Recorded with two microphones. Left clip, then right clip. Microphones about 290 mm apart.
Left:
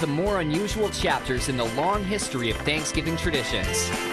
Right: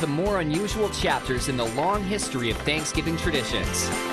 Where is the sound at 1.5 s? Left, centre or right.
Right.